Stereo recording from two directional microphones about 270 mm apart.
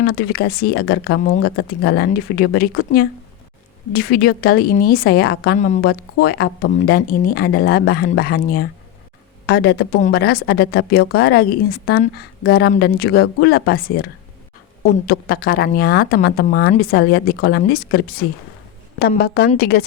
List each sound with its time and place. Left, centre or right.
0.0 s speech: left
15.0 s speech: left